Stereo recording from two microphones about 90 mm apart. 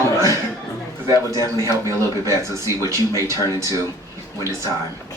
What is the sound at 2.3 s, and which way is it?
A man's voice, 35° right (ahead or behind).